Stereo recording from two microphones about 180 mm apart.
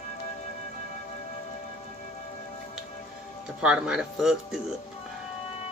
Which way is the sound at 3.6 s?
5° right (ahead or behind).